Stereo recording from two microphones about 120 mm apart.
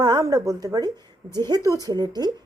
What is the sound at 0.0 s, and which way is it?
A woman's voice, 30° right (ahead or behind).